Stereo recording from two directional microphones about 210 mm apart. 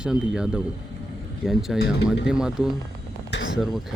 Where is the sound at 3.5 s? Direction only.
Centre (ahead or behind).